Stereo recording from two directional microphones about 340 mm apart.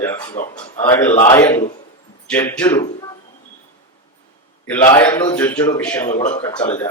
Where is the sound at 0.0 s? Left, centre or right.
Centre.